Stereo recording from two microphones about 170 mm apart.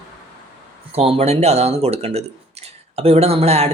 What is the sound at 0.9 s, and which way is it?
Speech, 35° right (ahead or behind).